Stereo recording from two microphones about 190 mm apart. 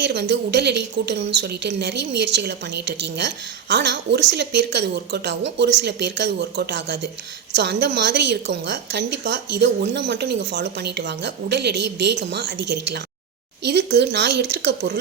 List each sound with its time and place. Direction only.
0.0 s a woman's voice: 65° right (ahead or behind)